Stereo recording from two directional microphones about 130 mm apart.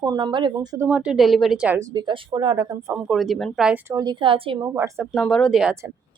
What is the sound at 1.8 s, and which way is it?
Speech, 30° right (ahead or behind).